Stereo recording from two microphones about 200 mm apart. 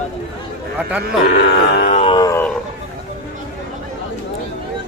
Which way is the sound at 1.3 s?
55° left (ahead or behind).